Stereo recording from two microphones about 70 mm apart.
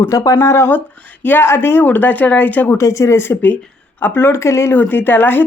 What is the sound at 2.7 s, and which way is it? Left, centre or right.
Speech, left.